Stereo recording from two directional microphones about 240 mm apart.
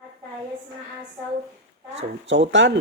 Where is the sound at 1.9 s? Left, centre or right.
Right.